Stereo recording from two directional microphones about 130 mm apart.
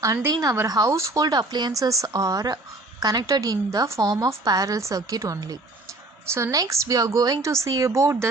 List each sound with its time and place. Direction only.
0.0 s a woman's voice: 25° right (ahead or behind)